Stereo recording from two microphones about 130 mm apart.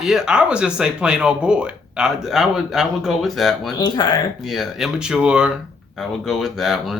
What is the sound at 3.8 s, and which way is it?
Speech, 30° left (ahead or behind).